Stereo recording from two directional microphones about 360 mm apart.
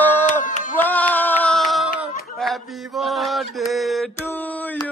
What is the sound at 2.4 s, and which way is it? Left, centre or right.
Mantra, centre.